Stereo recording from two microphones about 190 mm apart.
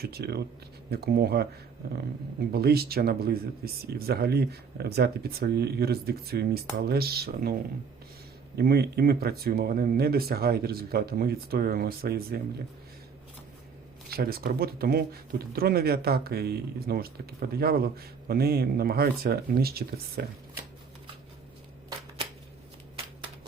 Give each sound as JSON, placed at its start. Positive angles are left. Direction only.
{"t": 0.0, "sound": "speech", "side_deg": -55}
{"t": 2.5, "sound": "speech", "side_deg": -55}
{"t": 8.5, "sound": "speech", "side_deg": -55}
{"t": 14.1, "sound": "speech", "side_deg": -55}